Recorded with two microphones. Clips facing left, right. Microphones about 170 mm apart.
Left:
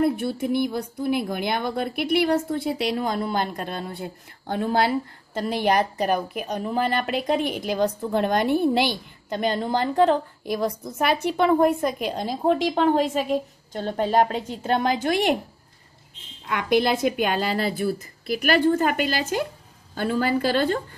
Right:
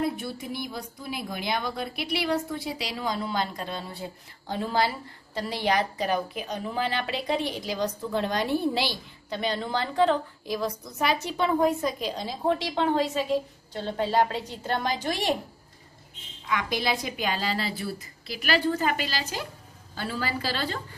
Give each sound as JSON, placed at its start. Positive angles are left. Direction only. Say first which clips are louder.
{"t": 0.0, "sound": "speech", "louder": "left 7 dB", "side_deg": 55}
{"t": 16.4, "sound": "speech", "louder": "left 7 dB", "side_deg": 55}